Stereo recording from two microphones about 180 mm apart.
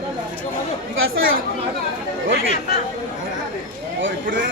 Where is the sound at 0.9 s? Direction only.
90° right.